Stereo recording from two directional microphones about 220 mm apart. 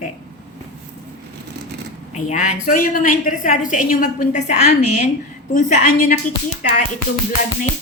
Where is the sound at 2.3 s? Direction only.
35° left (ahead or behind).